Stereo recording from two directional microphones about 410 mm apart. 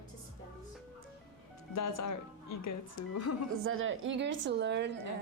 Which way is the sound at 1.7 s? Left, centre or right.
Left.